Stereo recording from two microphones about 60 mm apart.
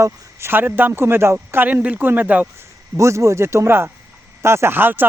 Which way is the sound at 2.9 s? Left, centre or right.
Right.